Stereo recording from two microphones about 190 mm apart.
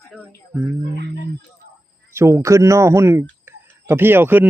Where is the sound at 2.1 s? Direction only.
15° right (ahead or behind).